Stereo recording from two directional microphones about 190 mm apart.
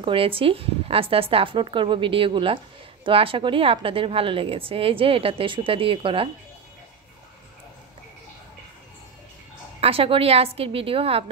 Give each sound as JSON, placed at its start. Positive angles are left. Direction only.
{"t": 0.0, "sound": "a woman's voice", "side_deg": -30}
{"t": 9.8, "sound": "a woman's voice", "side_deg": -30}